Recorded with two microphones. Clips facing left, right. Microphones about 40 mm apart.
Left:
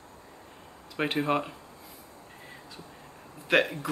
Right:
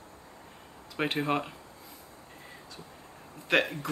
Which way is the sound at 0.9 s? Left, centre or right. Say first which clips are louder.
Left 2 dB; centre.